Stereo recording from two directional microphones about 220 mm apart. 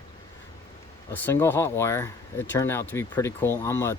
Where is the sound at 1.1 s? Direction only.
10° left (ahead or behind).